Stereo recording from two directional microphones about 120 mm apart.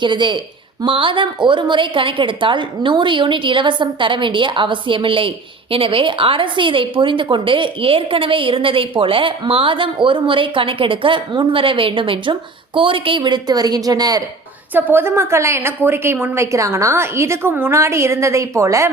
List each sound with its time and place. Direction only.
0.0 s a woman's voice: 40° right (ahead or behind)
14.7 s a woman's voice: 15° right (ahead or behind)